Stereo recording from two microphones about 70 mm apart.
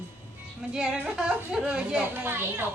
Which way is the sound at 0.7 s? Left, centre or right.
Centre.